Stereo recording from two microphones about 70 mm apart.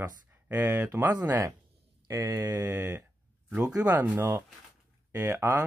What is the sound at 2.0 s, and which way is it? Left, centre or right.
Speech, right.